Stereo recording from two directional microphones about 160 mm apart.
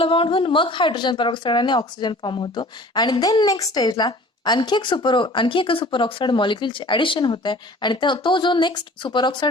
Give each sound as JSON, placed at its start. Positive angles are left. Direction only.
{"t": 0.0, "sound": "a woman's voice", "side_deg": 35}